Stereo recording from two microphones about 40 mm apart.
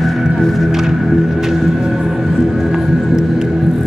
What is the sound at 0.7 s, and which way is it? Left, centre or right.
Music, centre.